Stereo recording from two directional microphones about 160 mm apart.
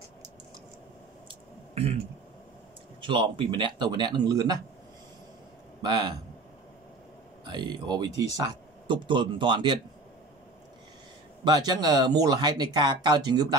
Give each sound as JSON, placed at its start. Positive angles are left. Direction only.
{"t": 3.0, "sound": "speech", "side_deg": -30}
{"t": 5.8, "sound": "a man's voice", "side_deg": -25}
{"t": 7.4, "sound": "speech", "side_deg": -30}
{"t": 11.4, "sound": "speech", "side_deg": -25}